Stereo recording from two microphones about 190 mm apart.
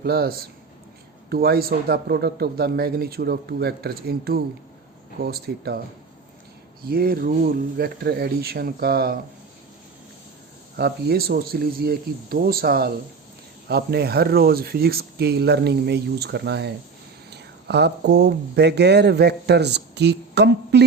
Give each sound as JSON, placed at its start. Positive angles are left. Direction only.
{"t": 0.0, "sound": "speech", "side_deg": -55}
{"t": 6.8, "sound": "speech", "side_deg": -50}
{"t": 10.8, "sound": "speech", "side_deg": -55}